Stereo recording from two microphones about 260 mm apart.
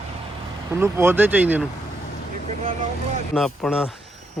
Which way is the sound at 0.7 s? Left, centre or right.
Centre.